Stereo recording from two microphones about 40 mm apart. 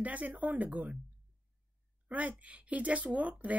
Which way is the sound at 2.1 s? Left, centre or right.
Right.